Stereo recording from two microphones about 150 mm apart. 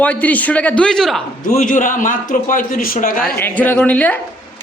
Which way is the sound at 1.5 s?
60° left (ahead or behind).